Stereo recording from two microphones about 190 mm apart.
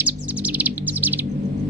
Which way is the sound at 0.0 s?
10° right (ahead or behind).